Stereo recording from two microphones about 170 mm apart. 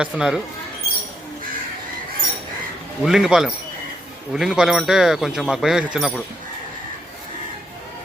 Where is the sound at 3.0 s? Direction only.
5° right (ahead or behind).